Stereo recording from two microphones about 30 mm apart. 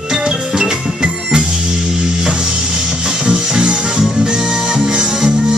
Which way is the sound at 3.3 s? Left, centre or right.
Right.